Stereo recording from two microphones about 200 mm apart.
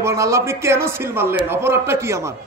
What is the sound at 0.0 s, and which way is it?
A man's voice, 15° right (ahead or behind).